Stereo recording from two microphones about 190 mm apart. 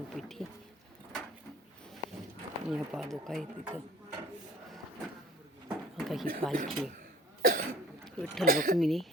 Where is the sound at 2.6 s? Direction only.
5° right (ahead or behind).